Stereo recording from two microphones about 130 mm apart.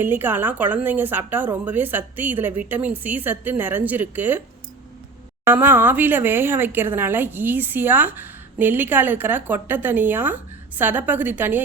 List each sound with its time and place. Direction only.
0.0 s a woman's voice: 15° right (ahead or behind)
5.5 s a woman's voice: 15° right (ahead or behind)